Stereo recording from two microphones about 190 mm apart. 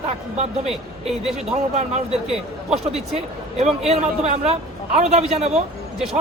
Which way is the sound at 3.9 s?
35° right (ahead or behind).